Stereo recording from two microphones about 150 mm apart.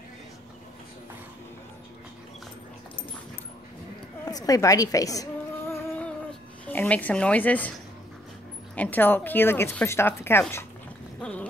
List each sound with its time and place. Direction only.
4.3 s a woman's voice: 25° left (ahead or behind)
6.6 s a woman's voice: 10° left (ahead or behind)
8.7 s speech: 10° left (ahead or behind)